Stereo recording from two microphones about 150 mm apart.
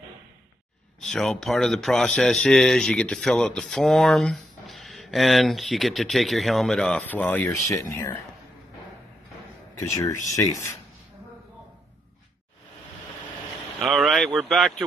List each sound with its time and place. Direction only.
1.0 s speech: 5° left (ahead or behind)
7.7 s speech: 20° left (ahead or behind)
10.3 s speech: 20° left (ahead or behind)
13.7 s speech: centre (ahead or behind)